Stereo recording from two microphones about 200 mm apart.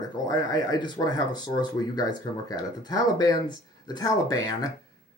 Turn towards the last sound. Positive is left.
turn(degrees=20)  # may be behind; listen again after turning